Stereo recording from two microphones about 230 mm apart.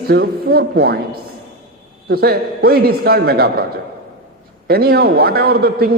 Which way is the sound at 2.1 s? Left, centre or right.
Right.